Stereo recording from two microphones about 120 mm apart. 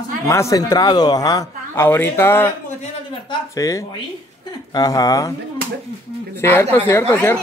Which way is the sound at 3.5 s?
30° left (ahead or behind).